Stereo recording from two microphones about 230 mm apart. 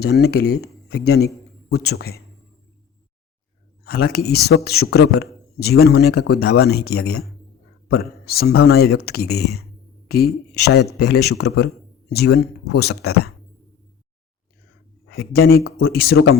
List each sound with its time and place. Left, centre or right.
0.0 s a man's voice: left
3.8 s a man's voice: left
15.1 s a man's voice: left